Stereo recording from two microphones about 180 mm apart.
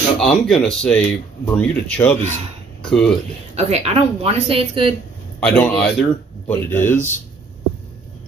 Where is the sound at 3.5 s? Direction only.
35° right (ahead or behind).